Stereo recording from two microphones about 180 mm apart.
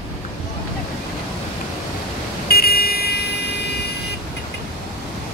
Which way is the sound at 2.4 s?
60° left (ahead or behind).